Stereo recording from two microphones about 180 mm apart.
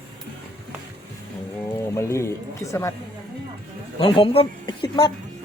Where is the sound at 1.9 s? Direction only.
15° left (ahead or behind).